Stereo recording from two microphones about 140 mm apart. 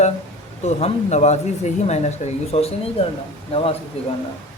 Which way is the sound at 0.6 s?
50° left (ahead or behind).